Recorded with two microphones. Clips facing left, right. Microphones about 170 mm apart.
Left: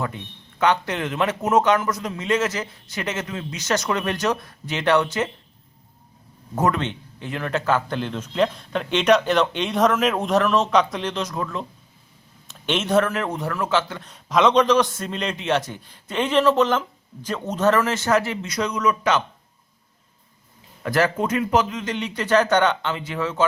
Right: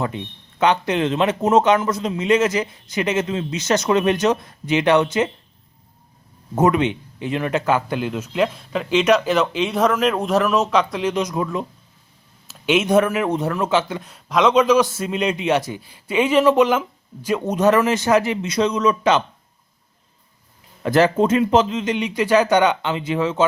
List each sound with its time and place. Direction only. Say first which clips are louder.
0.6 s a man's voice: right 3 dB; 20° right (ahead or behind)
6.6 s speech: right 5 dB; 15° right (ahead or behind)
11.1 s a man's voice: right 5 dB; 15° right (ahead or behind)
14.1 s a man's voice: right 1 dB; centre (ahead or behind); by 19.2 s 25° right (ahead or behind)
20.8 s a man's voice: right 5 dB; 25° right (ahead or behind)